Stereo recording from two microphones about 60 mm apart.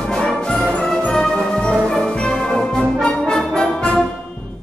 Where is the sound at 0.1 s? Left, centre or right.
Centre.